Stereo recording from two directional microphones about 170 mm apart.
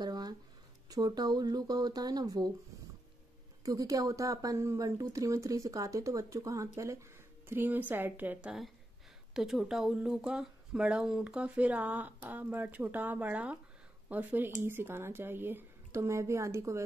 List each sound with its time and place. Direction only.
0.0 s a sound: 25° right (ahead or behind)
0.8 s speech: 25° right (ahead or behind)
3.6 s speech: 20° right (ahead or behind)